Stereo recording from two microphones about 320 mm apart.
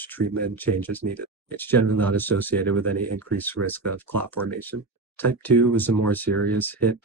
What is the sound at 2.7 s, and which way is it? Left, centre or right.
Speech, right.